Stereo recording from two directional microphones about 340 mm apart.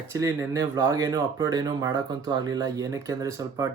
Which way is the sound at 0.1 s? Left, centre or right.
Centre.